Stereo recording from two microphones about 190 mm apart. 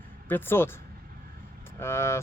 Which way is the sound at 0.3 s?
10° left (ahead or behind).